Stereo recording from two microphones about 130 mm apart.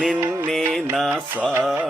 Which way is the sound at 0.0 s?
10° right (ahead or behind).